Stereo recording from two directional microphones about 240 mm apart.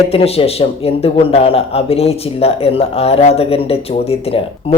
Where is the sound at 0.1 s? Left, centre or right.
Left.